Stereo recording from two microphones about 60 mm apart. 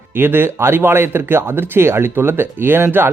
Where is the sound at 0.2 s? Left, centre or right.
Right.